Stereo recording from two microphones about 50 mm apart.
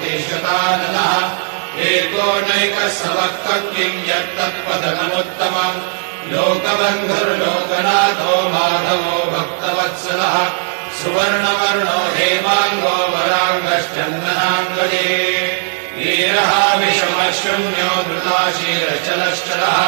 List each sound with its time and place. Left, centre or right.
0.3 s mantra: left
16.3 s chant: centre
17.6 s mantra: left